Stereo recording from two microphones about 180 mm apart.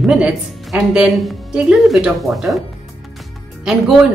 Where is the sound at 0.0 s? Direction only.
5° right (ahead or behind).